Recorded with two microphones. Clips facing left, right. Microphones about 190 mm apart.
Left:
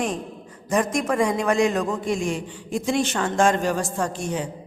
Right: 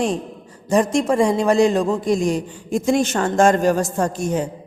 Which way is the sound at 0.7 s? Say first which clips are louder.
Right 5 dB; 30° right (ahead or behind).